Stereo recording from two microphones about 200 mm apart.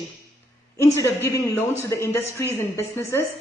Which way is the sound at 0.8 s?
15° left (ahead or behind).